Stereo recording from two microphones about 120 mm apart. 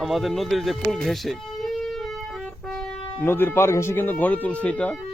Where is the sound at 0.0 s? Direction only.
Centre (ahead or behind).